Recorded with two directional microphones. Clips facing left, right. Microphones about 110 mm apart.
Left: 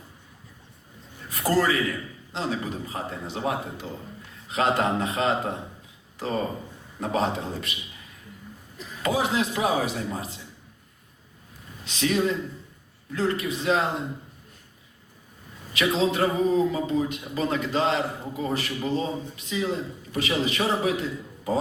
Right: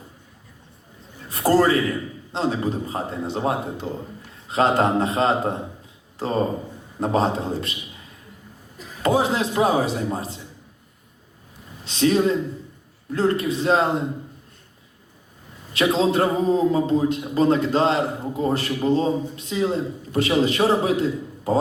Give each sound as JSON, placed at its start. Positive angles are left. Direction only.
{"t": 1.3, "sound": "a man's voice", "side_deg": -30}
{"t": 9.0, "sound": "a man's voice", "side_deg": -35}
{"t": 11.9, "sound": "a man's voice", "side_deg": -35}
{"t": 15.7, "sound": "a man's voice", "side_deg": -35}